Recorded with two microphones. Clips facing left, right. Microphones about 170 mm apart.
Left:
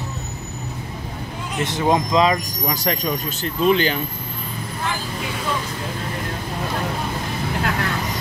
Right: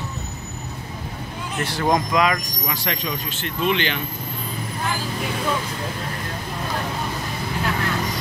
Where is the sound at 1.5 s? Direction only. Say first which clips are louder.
Left 2 dB; 20° left (ahead or behind).